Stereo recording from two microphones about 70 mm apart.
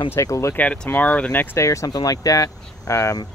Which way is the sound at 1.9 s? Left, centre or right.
Left.